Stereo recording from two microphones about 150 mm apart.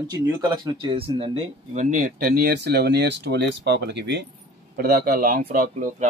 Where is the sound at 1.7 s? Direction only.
60° right (ahead or behind); by 3.0 s 90° right.